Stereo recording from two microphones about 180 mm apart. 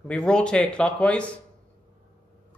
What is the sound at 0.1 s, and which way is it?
Speech, 5° left (ahead or behind).